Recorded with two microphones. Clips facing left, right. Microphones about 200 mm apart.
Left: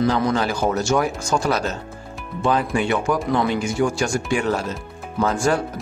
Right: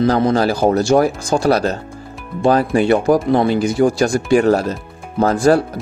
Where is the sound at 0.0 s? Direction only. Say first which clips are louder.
Right 5 dB; 35° right (ahead or behind).